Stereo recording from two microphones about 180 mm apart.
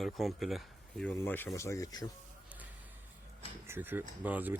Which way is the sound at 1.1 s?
10° left (ahead or behind).